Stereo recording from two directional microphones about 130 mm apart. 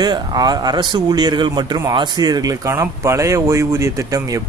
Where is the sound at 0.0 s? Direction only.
30° right (ahead or behind).